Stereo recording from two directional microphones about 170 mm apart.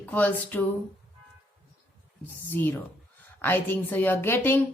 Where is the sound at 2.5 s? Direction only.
10° left (ahead or behind).